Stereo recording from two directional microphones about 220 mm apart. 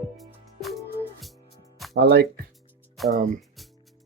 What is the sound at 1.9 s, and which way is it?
Speech, 50° right (ahead or behind).